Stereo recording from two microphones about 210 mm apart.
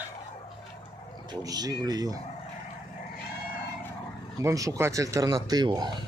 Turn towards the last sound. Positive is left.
turn(degrees=-20)  # may be behind; listen again after turning